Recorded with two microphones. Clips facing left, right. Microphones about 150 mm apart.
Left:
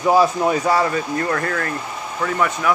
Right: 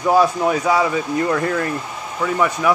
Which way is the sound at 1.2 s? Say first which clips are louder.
Right 3 dB; 15° right (ahead or behind).